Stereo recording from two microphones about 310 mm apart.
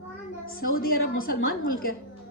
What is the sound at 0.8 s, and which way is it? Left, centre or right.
A woman's voice, left.